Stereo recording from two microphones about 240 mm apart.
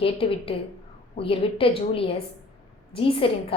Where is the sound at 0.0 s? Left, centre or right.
Left.